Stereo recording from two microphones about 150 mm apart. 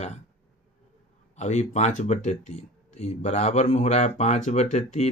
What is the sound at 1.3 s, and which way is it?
Speech, 50° left (ahead or behind).